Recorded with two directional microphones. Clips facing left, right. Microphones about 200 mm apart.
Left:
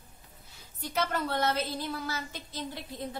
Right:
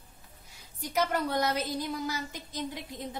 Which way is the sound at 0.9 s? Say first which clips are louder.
Right 2 dB; 15° right (ahead or behind).